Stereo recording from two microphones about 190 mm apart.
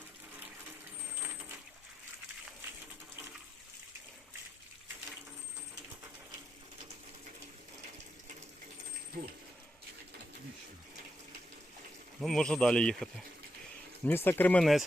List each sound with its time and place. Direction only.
1.2 s vehicle: 10° right (ahead or behind)
12.2 s speech: 5° left (ahead or behind)